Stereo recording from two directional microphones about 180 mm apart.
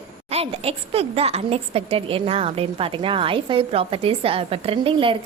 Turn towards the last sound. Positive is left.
turn(degrees=-30)  # may be behind; listen again after turning